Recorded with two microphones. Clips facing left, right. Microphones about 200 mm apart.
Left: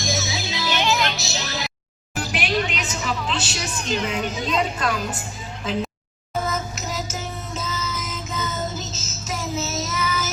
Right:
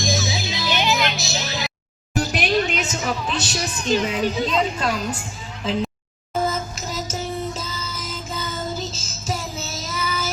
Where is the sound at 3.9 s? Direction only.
30° right (ahead or behind).